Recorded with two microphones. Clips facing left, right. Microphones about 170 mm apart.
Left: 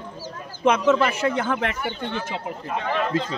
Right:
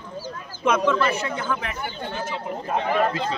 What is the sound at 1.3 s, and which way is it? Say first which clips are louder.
Speech: left 4 dB; 65° left (ahead or behind).